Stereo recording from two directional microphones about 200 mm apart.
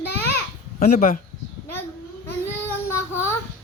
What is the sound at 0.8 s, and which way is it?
Speech, 45° left (ahead or behind).